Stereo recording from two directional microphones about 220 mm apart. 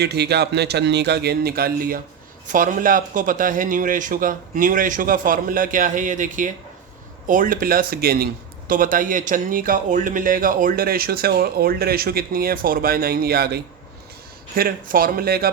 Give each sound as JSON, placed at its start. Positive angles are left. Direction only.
{"t": 0.0, "sound": "a man's voice", "side_deg": -50}